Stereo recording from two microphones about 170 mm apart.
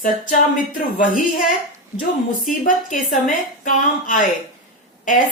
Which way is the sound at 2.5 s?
50° left (ahead or behind).